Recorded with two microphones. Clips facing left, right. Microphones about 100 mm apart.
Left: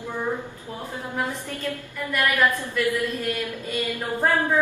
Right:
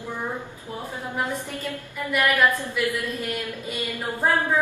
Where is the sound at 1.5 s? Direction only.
15° right (ahead or behind).